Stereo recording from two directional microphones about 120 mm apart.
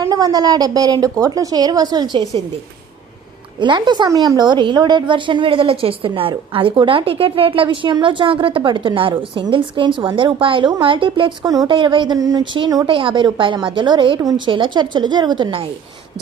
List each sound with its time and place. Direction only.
0.0 s a woman's voice: 30° right (ahead or behind)
3.6 s a woman's voice: 40° right (ahead or behind)
11.7 s a woman's voice: 45° right (ahead or behind)